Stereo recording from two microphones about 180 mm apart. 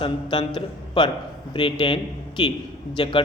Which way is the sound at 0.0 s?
25° left (ahead or behind).